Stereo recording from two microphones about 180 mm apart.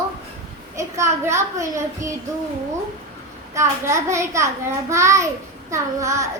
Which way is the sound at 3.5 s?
15° right (ahead or behind).